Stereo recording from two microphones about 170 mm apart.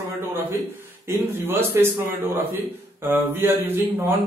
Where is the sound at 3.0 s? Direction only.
15° right (ahead or behind).